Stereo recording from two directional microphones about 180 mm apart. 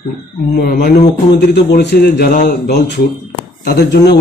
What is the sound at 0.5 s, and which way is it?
Speech, 60° left (ahead or behind).